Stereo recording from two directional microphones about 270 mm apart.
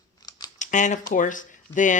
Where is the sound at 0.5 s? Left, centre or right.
Left.